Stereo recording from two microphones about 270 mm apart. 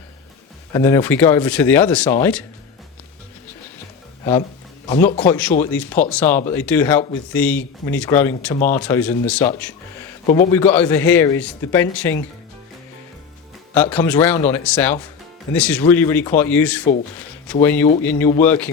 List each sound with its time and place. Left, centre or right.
0.7 s speech: centre
4.2 s speech: centre
10.2 s a man's voice: left
10.5 s speech: centre
13.9 s speech: centre